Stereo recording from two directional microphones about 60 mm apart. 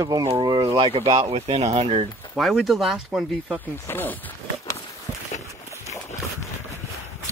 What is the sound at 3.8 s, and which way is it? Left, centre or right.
Speech, left.